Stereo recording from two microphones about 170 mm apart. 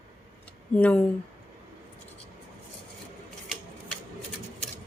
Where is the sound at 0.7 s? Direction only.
10° left (ahead or behind).